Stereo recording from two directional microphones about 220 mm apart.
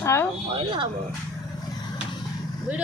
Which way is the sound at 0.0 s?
10° left (ahead or behind).